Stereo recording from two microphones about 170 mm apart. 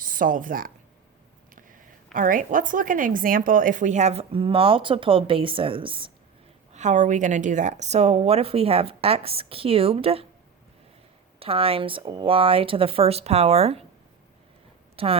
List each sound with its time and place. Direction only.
0.0 s speech: 55° right (ahead or behind)
1.5 s a sound: 50° right (ahead or behind)
2.1 s a woman's voice: 50° right (ahead or behind); by 6.1 s 30° right (ahead or behind)
6.7 s a woman's voice: 45° right (ahead or behind)
11.3 s a woman's voice: 35° right (ahead or behind)
14.9 s a woman's voice: 35° right (ahead or behind)